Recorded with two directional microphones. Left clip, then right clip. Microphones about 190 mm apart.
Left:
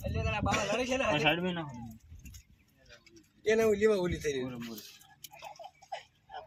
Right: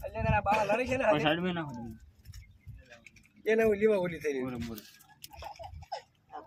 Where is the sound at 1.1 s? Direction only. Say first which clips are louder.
Even; 15° left (ahead or behind).